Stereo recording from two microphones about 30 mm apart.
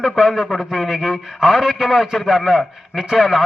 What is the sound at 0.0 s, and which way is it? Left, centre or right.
A man's voice, centre.